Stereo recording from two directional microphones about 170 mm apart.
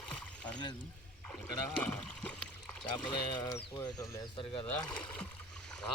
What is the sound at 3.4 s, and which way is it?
Speech, 20° left (ahead or behind).